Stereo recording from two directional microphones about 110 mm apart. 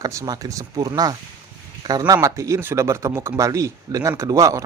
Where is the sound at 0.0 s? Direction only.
30° right (ahead or behind).